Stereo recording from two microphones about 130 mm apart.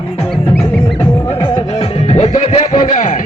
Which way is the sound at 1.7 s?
55° left (ahead or behind).